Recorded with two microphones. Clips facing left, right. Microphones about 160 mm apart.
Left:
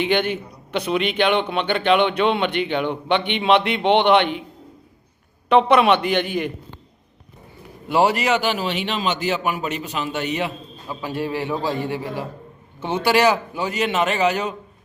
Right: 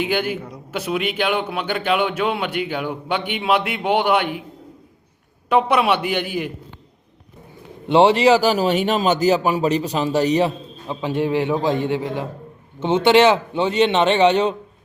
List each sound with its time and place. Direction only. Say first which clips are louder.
0.0 s a man's voice: left 1 dB; 5° right (ahead or behind)
5.5 s a man's voice: left 2 dB; 10° right (ahead or behind)
7.9 s a man's voice: right 5 dB; 25° right (ahead or behind)
11.0 s a man's voice: right 5 dB; 20° right (ahead or behind)